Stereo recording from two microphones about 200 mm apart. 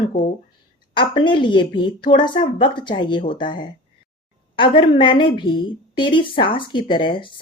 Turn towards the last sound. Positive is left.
turn(degrees=25)  # may be behind; listen again after turning